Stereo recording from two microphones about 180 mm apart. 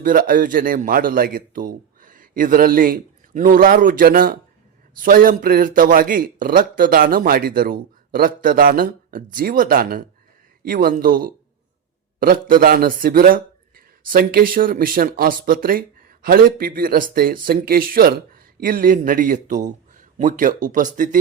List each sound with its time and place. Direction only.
0.0 s speech: 50° right (ahead or behind)